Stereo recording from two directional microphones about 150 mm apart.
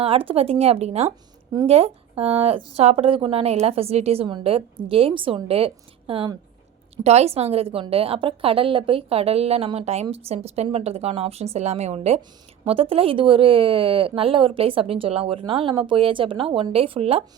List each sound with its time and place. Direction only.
0.0 s a woman's voice: 40° right (ahead or behind)